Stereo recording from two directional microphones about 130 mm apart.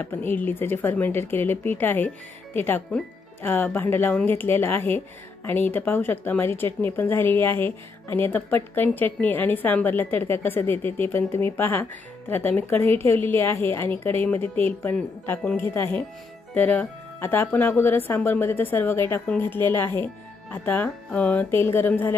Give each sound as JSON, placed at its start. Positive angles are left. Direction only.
{"t": 0.0, "sound": "speech", "side_deg": 15}